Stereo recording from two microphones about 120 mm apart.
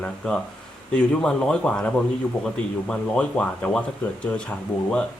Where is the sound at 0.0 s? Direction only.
10° left (ahead or behind).